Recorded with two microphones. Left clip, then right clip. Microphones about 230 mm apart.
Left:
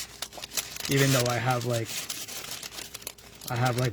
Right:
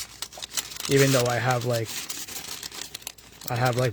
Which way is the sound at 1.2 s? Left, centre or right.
Right.